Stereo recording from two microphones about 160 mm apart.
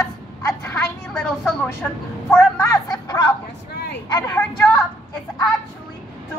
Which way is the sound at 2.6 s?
20° left (ahead or behind).